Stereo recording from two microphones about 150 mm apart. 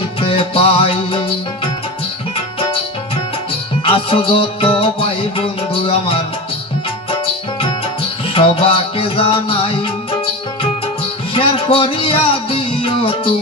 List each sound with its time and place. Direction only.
0.2 s music: 35° left (ahead or behind)
3.8 s music: 35° left (ahead or behind)
8.3 s music: 40° left (ahead or behind)
11.3 s music: 35° left (ahead or behind)